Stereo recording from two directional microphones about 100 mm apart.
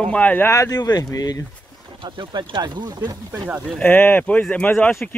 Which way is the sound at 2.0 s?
50° right (ahead or behind).